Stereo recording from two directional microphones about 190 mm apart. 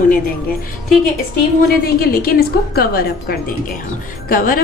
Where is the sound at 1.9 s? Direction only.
55° left (ahead or behind).